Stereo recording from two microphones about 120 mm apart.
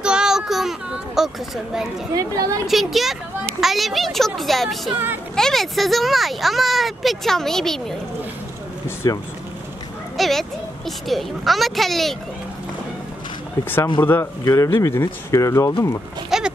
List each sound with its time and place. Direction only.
0.0 s a sound: 5° right (ahead or behind)
2.1 s speech: 30° right (ahead or behind)
2.6 s speech: centre (ahead or behind)
4.9 s a woman's voice: 15° right (ahead or behind)
5.3 s speech: 5° left (ahead or behind)
8.8 s speech: 25° left (ahead or behind)
10.1 s a child's voice: centre (ahead or behind)
14.0 s a man's voice: 15° left (ahead or behind)
14.4 s speech: 30° left (ahead or behind)
16.3 s a sound: 5° right (ahead or behind)